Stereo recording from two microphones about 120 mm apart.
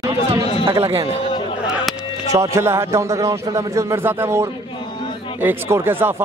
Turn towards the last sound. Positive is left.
turn(degrees=-20)  # may be behind; listen again after turning